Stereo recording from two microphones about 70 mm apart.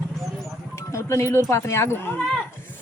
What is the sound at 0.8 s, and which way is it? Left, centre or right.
Speech, left.